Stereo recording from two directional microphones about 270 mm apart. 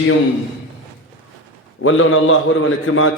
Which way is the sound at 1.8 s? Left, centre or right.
Left.